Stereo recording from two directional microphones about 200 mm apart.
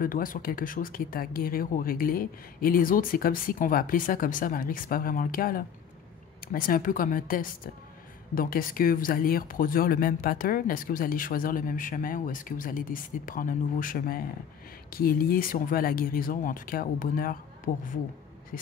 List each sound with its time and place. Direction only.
0.0 s speech: 45° left (ahead or behind)